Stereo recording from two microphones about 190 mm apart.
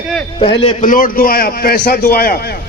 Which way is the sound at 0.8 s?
45° left (ahead or behind).